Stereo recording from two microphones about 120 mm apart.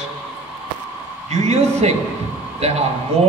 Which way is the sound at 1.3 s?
65° right (ahead or behind).